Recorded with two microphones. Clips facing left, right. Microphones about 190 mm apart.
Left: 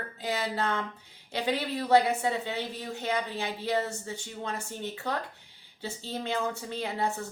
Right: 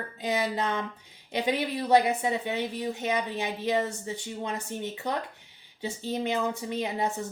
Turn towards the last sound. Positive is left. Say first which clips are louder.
# right 2 dB
turn(degrees=-15)  # may be behind; listen again after turning